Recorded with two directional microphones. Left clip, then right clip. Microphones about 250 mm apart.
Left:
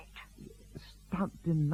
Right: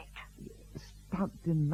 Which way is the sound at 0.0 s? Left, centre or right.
Left.